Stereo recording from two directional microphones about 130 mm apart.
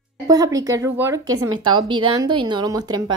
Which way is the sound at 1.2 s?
35° right (ahead or behind).